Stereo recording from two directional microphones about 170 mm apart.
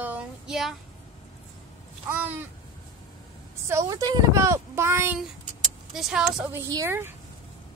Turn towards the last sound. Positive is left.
turn(degrees=-15)  # may be behind; listen again after turning